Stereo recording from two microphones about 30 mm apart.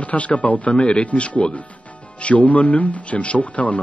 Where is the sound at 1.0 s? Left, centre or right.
Left.